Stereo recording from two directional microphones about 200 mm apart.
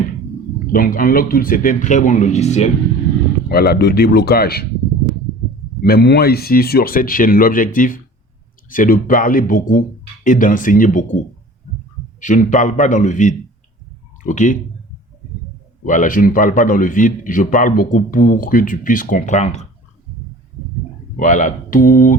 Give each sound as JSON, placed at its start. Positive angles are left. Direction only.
{"t": 0.7, "sound": "speech", "side_deg": 45}
{"t": 3.5, "sound": "speech", "side_deg": 50}
{"t": 5.8, "sound": "a man's voice", "side_deg": 50}
{"t": 12.2, "sound": "a man's voice", "side_deg": 40}
{"t": 15.8, "sound": "a man's voice", "side_deg": 40}
{"t": 21.2, "sound": "a man's voice", "side_deg": 40}